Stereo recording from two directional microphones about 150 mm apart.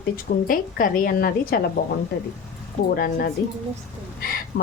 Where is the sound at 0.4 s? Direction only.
65° left (ahead or behind); by 1.6 s 85° left.